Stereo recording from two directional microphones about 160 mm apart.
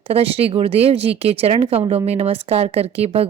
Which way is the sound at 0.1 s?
35° right (ahead or behind).